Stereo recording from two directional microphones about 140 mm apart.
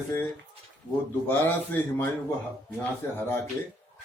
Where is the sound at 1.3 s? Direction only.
15° left (ahead or behind).